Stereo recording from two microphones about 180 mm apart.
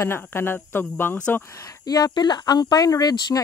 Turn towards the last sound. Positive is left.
turn(degrees=20)  # may be behind; listen again after turning